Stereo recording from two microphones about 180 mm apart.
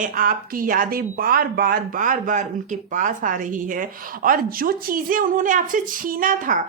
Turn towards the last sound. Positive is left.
turn(degrees=-45)  # may be behind; listen again after turning